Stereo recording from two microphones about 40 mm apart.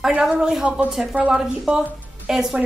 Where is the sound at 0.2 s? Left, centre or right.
Centre.